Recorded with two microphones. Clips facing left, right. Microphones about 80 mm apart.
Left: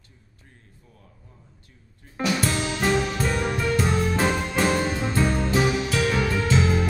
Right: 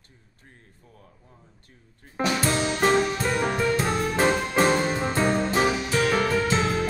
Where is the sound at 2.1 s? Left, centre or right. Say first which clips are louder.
Right 1 dB; right.